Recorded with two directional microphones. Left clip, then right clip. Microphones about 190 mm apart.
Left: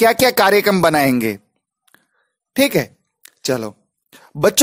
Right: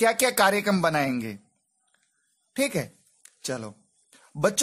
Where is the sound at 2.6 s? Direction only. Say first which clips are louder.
Left 11 dB; 40° left (ahead or behind).